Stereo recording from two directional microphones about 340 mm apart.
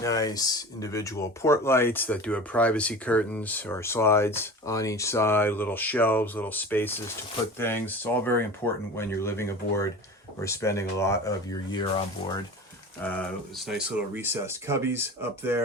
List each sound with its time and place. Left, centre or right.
0.0 s speech: centre
13.0 s speech: centre